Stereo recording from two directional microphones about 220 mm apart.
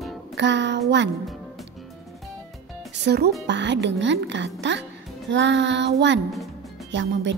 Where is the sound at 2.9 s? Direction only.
50° right (ahead or behind).